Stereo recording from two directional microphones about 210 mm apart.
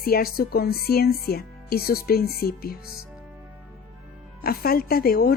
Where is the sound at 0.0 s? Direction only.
45° left (ahead or behind).